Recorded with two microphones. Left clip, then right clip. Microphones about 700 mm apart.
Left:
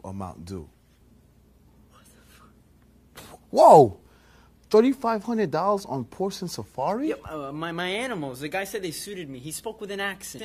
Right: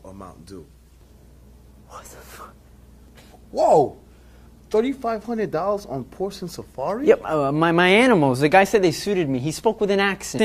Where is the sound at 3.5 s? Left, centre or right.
Left.